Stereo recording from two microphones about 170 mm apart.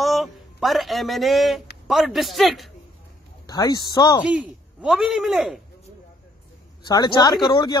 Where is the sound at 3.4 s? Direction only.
25° left (ahead or behind).